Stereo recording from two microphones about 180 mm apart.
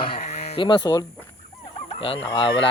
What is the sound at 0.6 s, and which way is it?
Speech, 25° left (ahead or behind).